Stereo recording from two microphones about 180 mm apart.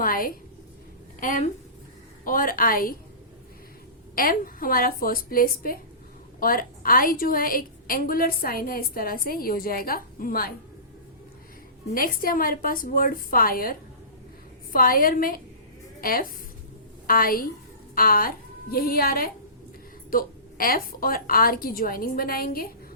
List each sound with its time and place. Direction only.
0.0 s a woman's voice: 50° left (ahead or behind)
4.1 s a woman's voice: 50° left (ahead or behind)
11.9 s a woman's voice: 55° left (ahead or behind)